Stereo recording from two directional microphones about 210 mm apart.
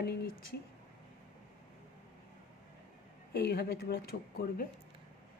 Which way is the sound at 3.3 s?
50° left (ahead or behind).